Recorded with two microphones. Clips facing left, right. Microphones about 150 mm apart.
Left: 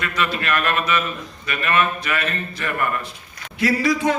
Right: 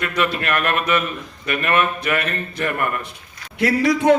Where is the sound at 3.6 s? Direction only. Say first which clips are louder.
Right 2 dB; 60° right (ahead or behind).